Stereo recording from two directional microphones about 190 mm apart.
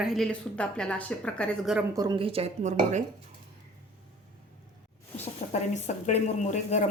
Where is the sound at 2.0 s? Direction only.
25° right (ahead or behind).